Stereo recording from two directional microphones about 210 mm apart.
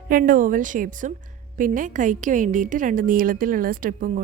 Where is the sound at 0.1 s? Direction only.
40° right (ahead or behind).